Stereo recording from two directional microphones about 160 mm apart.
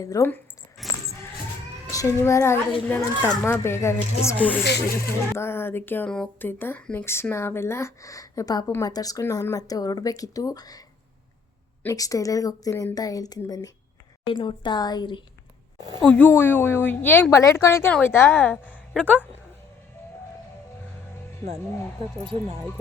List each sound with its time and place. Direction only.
0.0 s speech: 20° left (ahead or behind)
0.8 s a sound: centre (ahead or behind)
1.9 s speech: 20° left (ahead or behind)
16.0 s speech: 10° left (ahead or behind)